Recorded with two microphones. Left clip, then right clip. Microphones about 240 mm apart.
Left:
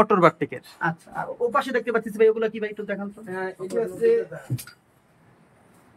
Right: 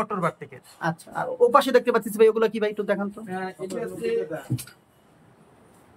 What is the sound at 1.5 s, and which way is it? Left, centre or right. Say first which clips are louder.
Speech: right 3 dB; centre.